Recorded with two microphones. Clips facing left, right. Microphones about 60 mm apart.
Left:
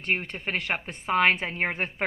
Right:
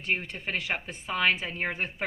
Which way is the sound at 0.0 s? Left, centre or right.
Left.